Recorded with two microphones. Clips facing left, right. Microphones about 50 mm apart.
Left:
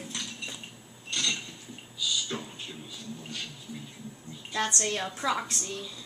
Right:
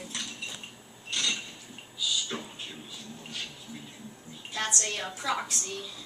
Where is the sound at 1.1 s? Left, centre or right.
Centre.